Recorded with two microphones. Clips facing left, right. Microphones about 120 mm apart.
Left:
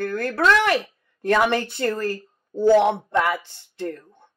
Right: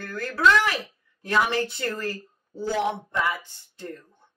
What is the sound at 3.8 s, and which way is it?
Speech, 55° left (ahead or behind).